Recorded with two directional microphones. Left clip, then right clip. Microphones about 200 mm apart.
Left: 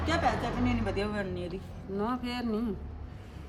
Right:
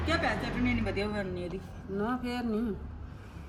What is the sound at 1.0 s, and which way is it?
Speech, centre (ahead or behind).